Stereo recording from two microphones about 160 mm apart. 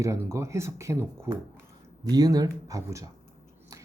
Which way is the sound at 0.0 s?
20° right (ahead or behind).